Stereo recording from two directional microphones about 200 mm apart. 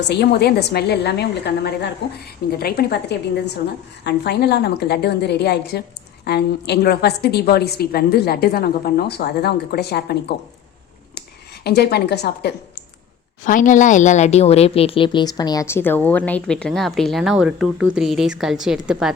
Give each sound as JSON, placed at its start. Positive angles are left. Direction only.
{"t": 0.1, "sound": "a woman's voice", "side_deg": 55}
{"t": 11.6, "sound": "a woman's voice", "side_deg": 55}
{"t": 13.4, "sound": "a woman's voice", "side_deg": 40}